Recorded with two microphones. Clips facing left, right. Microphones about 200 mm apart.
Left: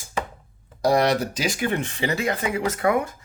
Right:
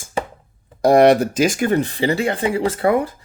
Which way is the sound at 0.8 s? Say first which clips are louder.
Right 8 dB; 55° right (ahead or behind).